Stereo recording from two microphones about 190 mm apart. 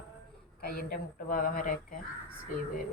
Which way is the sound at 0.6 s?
50° left (ahead or behind).